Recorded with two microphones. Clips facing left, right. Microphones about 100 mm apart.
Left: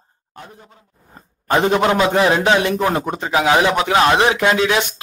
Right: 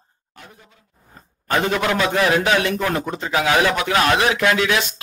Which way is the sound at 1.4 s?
25° left (ahead or behind).